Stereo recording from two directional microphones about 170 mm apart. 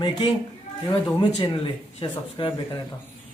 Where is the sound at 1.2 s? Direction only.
25° left (ahead or behind).